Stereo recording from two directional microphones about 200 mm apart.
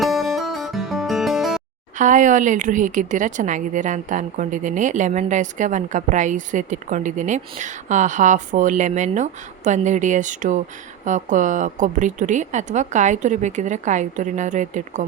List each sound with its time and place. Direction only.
0.0 s music: centre (ahead or behind)
2.0 s a woman's voice: 40° right (ahead or behind)